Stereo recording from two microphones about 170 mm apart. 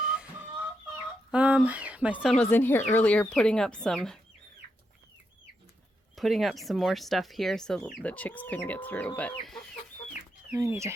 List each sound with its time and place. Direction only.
1.3 s speech: 5° right (ahead or behind)
2.4 s speech: 10° left (ahead or behind)
6.1 s speech: centre (ahead or behind)
10.5 s speech: 15° right (ahead or behind)